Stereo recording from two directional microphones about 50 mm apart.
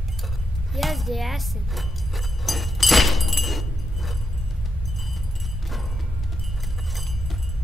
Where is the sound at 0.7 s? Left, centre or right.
Centre.